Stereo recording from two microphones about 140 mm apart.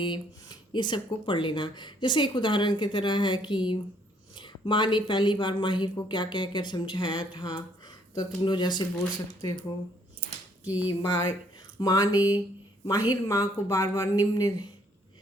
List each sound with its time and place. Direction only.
0.0 s speech: 30° left (ahead or behind)
10.6 s speech: 10° right (ahead or behind)
10.8 s speech: 30° left (ahead or behind)